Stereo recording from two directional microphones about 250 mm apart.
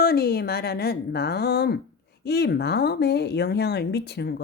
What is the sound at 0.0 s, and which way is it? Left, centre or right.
Speech, left.